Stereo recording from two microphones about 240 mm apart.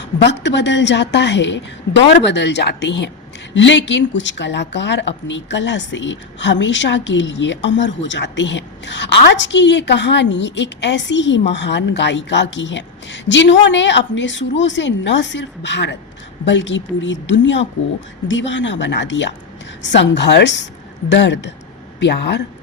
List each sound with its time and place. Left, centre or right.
0.0 s a woman's voice: left